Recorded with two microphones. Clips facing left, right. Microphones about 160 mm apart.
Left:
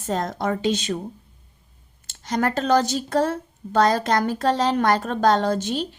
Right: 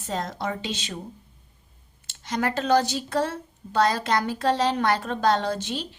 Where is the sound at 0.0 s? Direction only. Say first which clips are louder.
Left 5 dB; 45° left (ahead or behind).